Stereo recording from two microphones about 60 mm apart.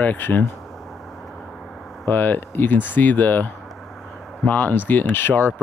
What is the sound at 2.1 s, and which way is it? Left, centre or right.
Speech, left.